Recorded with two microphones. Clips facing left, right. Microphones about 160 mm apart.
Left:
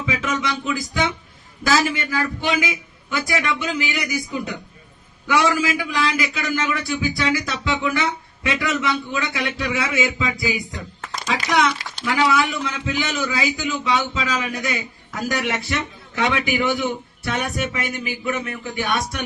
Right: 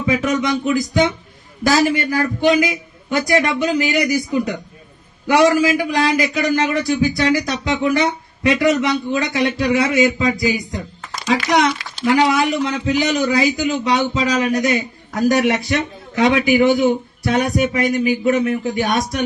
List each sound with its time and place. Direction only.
0.0 s a man's voice: 40° right (ahead or behind)